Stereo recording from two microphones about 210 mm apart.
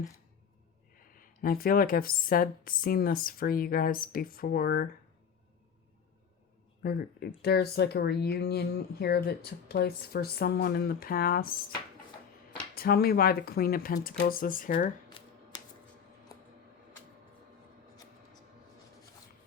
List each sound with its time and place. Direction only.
0.9 s speech: 40° left (ahead or behind)
6.8 s speech: 50° left (ahead or behind)
12.7 s speech: 45° left (ahead or behind)
15.2 s a sound: 25° left (ahead or behind)